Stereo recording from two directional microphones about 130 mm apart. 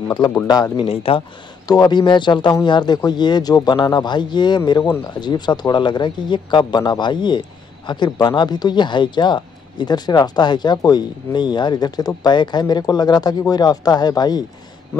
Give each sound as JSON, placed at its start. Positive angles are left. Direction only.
{"t": 0.7, "sound": "speech", "side_deg": 45}
{"t": 1.7, "sound": "speech", "side_deg": 35}